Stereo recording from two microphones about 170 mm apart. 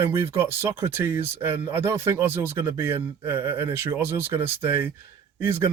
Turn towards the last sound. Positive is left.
turn(degrees=-15)  # may be behind; listen again after turning